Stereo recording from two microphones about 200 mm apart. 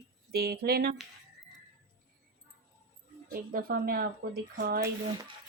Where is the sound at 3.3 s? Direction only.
45° right (ahead or behind).